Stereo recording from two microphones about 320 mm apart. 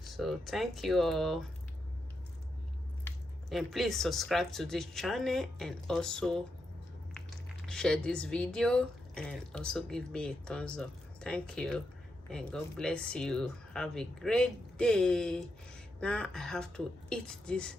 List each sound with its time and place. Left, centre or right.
0.1 s speech: centre
3.5 s speech: centre